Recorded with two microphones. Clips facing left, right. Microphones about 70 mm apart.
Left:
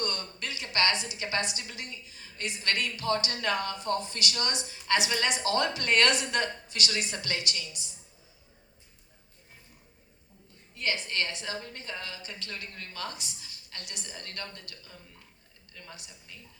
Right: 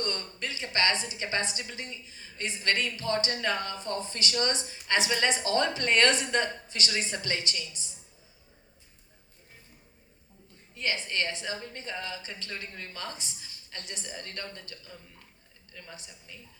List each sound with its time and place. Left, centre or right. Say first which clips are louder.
0.0 s a woman's voice: right 1 dB; right
10.8 s a woman's voice: even; right